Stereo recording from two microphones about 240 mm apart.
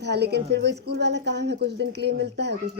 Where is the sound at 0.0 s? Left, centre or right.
Right.